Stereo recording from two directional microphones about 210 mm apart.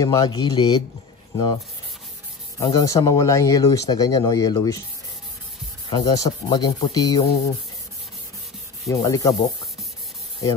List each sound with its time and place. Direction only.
0.0 s speech: 20° left (ahead or behind)
2.6 s speech: 20° left (ahead or behind)
5.9 s speech: 20° left (ahead or behind)
8.8 s speech: 15° left (ahead or behind)